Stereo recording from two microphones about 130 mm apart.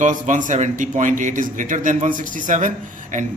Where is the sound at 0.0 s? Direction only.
75° right (ahead or behind).